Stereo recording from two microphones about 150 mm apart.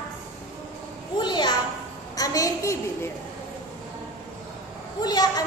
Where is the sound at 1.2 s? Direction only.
30° left (ahead or behind).